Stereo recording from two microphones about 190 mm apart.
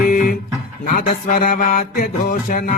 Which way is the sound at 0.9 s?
50° left (ahead or behind).